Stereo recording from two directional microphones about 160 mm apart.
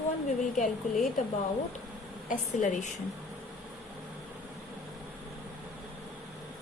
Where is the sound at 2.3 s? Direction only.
50° left (ahead or behind).